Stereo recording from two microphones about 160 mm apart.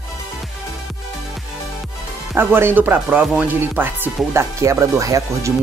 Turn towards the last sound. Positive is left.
turn(degrees=-20)  # may be behind; listen again after turning